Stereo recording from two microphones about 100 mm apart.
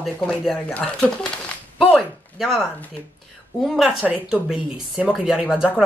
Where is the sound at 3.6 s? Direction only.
Centre (ahead or behind).